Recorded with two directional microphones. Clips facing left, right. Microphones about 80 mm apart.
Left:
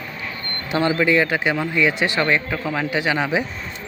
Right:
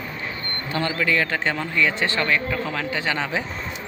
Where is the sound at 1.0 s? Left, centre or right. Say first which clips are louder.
Left 2 dB; centre.